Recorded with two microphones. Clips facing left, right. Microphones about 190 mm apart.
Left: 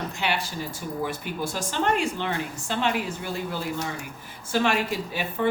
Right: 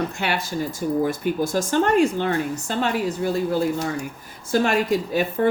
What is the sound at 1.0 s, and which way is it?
Speech, 45° right (ahead or behind).